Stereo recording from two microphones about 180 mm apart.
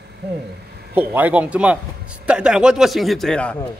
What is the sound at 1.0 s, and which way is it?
A man's voice, 10° right (ahead or behind).